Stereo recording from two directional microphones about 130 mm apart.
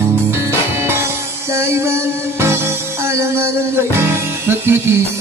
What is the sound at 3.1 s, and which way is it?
Music, 20° right (ahead or behind).